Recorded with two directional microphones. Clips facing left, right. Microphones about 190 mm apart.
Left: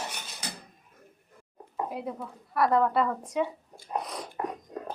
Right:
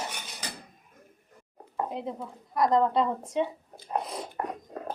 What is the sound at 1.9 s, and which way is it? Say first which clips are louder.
A woman's voice: even; 25° right (ahead or behind).